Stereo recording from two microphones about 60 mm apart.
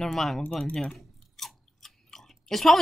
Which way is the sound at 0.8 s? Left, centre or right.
Centre.